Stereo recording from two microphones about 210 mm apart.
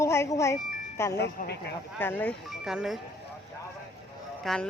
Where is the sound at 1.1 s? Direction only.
50° left (ahead or behind).